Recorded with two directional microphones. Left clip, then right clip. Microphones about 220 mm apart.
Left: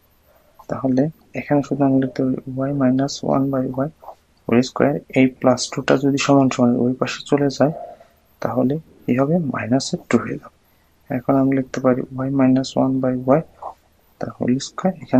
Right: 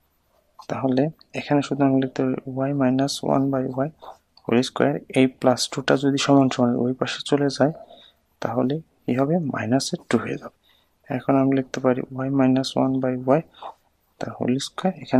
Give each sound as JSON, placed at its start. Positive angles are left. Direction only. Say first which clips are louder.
{"t": 0.7, "sound": "speech", "louder": "left 2 dB", "side_deg": -30}